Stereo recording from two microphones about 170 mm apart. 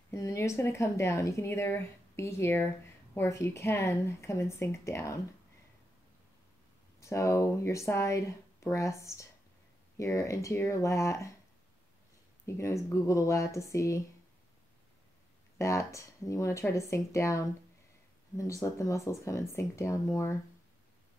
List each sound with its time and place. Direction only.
0.1 s speech: 15° left (ahead or behind)
7.0 s speech: 15° left (ahead or behind)
12.4 s speech: 15° left (ahead or behind)
15.5 s speech: 15° left (ahead or behind)